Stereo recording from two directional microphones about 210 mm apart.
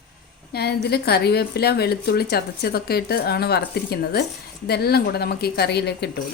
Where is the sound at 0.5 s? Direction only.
50° left (ahead or behind).